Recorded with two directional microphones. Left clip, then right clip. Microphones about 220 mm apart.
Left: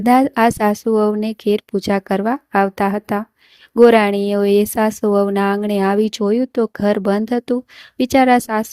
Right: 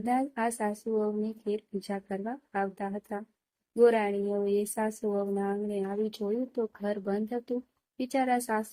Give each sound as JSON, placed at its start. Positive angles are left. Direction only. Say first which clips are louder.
{"t": 0.0, "sound": "a woman's voice", "louder": "left 16 dB", "side_deg": 45}